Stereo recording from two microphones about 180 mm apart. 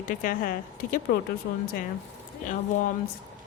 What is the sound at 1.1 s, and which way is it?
Speech, 60° left (ahead or behind).